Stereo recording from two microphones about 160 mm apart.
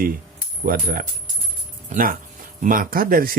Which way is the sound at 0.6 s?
65° right (ahead or behind).